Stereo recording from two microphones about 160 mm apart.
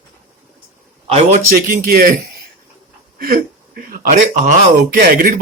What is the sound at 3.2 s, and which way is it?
Speech, 65° right (ahead or behind).